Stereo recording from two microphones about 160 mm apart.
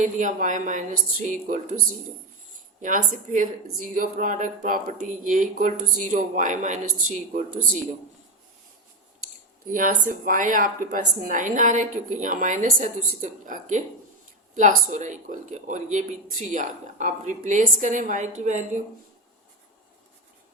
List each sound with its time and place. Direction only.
0.0 s speech: 55° right (ahead or behind)
2.8 s a woman's voice: 55° right (ahead or behind)
9.6 s a woman's voice: 55° right (ahead or behind)